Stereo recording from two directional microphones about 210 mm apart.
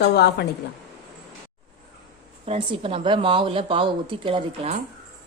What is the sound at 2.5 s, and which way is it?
A woman's voice, 25° right (ahead or behind).